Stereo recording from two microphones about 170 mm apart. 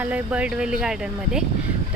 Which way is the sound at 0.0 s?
10° right (ahead or behind).